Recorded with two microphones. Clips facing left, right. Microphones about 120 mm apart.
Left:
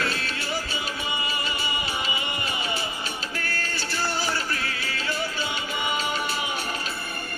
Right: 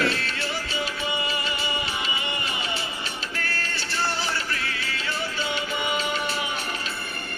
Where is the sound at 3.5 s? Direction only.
40° left (ahead or behind).